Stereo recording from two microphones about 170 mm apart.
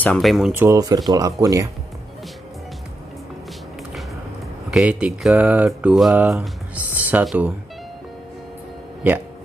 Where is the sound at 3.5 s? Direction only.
Centre (ahead or behind).